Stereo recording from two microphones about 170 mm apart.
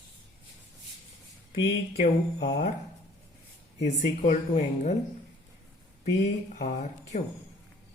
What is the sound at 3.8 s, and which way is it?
Speech, 45° left (ahead or behind).